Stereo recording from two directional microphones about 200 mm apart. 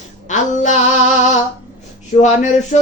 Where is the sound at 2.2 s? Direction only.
35° left (ahead or behind).